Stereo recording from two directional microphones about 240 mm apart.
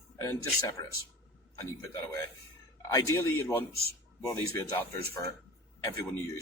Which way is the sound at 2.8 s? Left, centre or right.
Centre.